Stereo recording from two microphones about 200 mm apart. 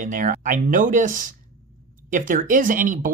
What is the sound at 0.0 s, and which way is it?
Speech, 40° right (ahead or behind).